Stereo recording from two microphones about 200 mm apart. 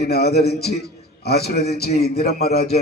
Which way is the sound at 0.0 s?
55° left (ahead or behind).